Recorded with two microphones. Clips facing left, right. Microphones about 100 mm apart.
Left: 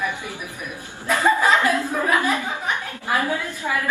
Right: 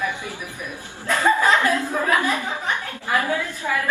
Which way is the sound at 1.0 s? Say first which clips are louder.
Even; 15° left (ahead or behind).